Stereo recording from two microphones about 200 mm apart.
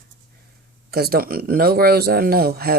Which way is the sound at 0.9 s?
50° right (ahead or behind).